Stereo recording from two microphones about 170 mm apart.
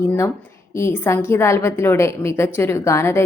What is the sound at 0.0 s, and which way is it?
A woman's voice, 15° left (ahead or behind).